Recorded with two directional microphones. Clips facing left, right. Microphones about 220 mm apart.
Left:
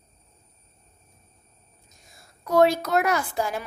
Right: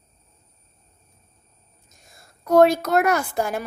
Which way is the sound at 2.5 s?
50° right (ahead or behind).